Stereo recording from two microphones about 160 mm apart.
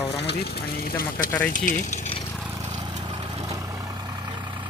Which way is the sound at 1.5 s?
55° left (ahead or behind).